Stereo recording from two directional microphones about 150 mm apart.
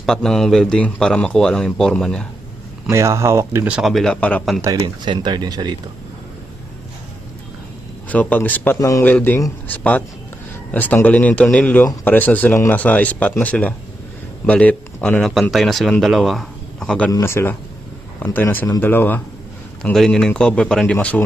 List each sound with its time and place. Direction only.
0.0 s a man's voice: 5° left (ahead or behind)
2.9 s speech: 20° right (ahead or behind)
3.8 s a man's voice: centre (ahead or behind)
4.6 s speech: 25° right (ahead or behind)
8.0 s a man's voice: 10° left (ahead or behind)
17.1 s a man's voice: 20° left (ahead or behind)